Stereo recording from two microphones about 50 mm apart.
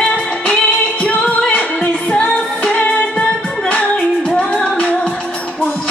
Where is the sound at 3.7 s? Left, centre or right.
Left.